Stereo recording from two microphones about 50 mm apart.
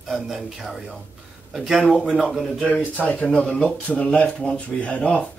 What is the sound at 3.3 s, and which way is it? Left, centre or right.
Speech, centre.